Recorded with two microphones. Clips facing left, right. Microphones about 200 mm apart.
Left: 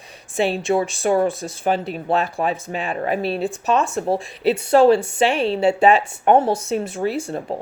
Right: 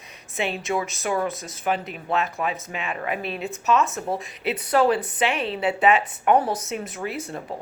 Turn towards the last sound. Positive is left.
turn(degrees=30)  # may be behind; listen again after turning